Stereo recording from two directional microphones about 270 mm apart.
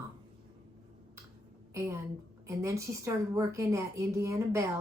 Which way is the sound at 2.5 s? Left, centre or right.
Centre.